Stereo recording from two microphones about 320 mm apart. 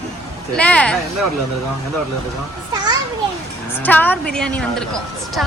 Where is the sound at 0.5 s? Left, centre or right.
Centre.